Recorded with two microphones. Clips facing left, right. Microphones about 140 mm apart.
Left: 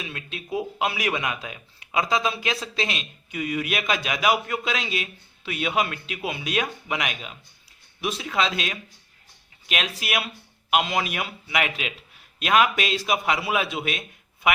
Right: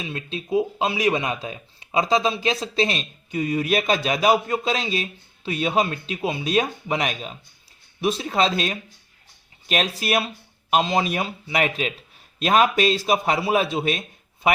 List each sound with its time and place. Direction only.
0.0 s speech: 30° right (ahead or behind)